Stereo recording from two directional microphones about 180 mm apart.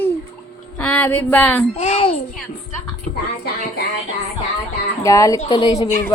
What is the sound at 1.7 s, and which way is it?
Speech, 35° left (ahead or behind).